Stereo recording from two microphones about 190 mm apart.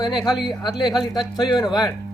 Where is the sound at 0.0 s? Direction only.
20° left (ahead or behind).